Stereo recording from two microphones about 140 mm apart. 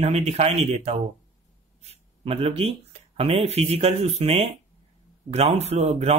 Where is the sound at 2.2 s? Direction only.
45° right (ahead or behind).